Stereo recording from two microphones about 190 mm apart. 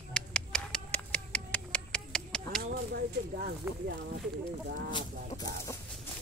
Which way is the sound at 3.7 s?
10° right (ahead or behind).